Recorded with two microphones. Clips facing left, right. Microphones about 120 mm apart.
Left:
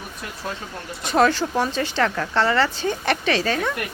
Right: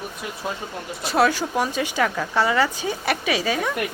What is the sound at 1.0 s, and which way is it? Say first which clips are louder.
A woman's voice: left 1 dB; 5° right (ahead or behind).